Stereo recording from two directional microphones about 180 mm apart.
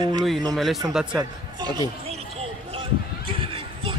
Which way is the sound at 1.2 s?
20° right (ahead or behind).